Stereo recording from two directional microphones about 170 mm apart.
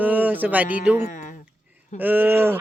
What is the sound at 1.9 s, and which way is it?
Speech, 10° right (ahead or behind).